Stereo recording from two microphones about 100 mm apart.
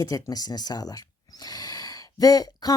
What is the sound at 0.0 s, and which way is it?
Speech, 40° left (ahead or behind).